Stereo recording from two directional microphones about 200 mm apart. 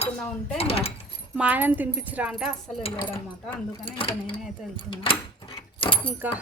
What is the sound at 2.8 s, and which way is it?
Speech, 30° left (ahead or behind).